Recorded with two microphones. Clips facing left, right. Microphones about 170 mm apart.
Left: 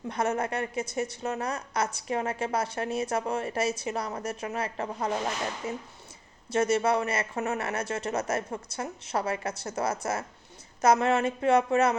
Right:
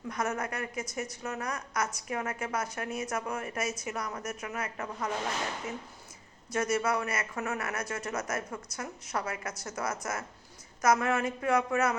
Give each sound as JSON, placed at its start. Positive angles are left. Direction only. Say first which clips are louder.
{"t": 0.1, "sound": "a woman's voice", "louder": "left 5 dB", "side_deg": 30}